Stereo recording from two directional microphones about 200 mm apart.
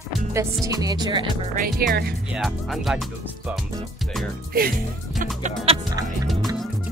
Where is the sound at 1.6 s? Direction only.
55° right (ahead or behind).